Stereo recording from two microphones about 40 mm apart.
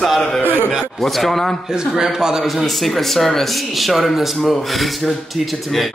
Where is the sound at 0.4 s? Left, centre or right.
Right.